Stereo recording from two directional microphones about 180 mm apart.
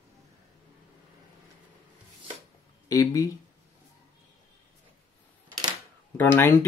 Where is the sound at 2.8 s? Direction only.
20° left (ahead or behind).